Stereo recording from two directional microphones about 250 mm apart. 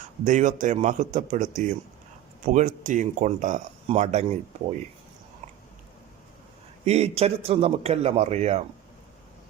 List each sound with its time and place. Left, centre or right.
0.3 s speech: right
6.8 s speech: right